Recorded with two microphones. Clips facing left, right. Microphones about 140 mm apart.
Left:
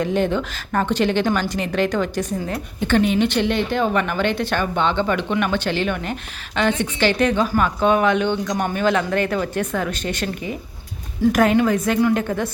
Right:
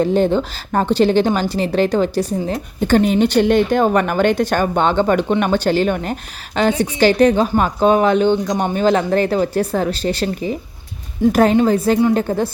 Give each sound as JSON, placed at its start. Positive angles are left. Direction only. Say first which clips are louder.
{"t": 0.0, "sound": "a woman's voice", "louder": "right 5 dB", "side_deg": -35}